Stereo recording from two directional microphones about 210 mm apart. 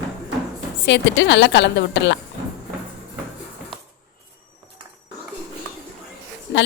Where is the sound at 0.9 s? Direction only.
60° left (ahead or behind).